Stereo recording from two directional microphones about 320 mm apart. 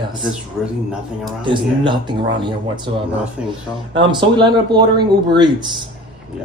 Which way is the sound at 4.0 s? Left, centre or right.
Centre.